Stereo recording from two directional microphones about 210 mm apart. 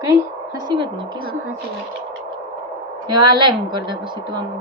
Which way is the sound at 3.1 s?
20° right (ahead or behind).